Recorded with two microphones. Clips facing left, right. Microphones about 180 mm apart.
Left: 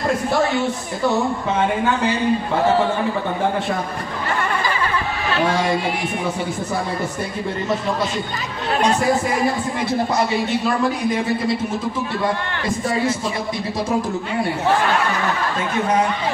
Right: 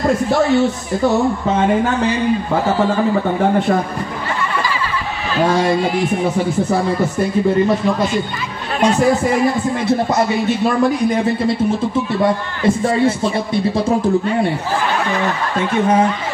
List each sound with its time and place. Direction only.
12.6 s a man's voice: 30° right (ahead or behind)